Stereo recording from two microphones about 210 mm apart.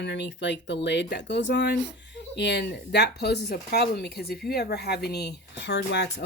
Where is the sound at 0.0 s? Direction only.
55° left (ahead or behind).